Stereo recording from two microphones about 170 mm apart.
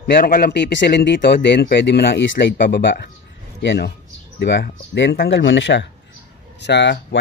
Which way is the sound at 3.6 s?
75° left (ahead or behind).